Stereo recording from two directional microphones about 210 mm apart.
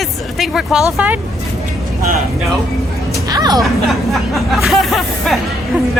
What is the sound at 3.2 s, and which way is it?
Music, 20° right (ahead or behind).